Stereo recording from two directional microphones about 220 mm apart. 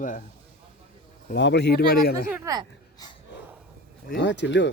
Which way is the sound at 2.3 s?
10° right (ahead or behind).